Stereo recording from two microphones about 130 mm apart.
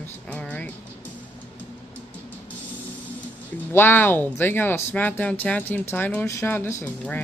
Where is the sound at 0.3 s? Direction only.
10° left (ahead or behind).